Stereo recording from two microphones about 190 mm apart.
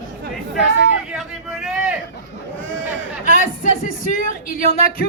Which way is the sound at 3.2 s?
45° left (ahead or behind).